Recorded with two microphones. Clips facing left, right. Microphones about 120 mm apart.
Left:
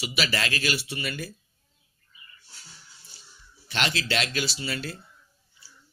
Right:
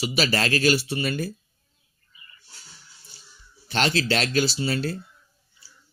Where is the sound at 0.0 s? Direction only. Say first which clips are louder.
Right 5 dB; 35° right (ahead or behind).